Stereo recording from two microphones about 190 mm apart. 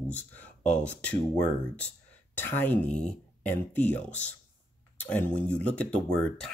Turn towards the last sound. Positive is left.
turn(degrees=5)  # may be behind; listen again after turning